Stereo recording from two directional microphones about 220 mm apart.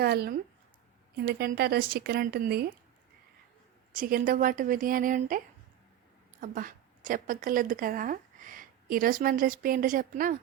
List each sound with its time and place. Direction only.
0.0 s speech: 45° right (ahead or behind)
3.9 s speech: 40° right (ahead or behind)
6.4 s a woman's voice: 35° right (ahead or behind)